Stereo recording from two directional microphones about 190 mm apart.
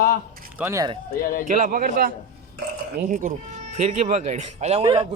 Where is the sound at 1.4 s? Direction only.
40° right (ahead or behind).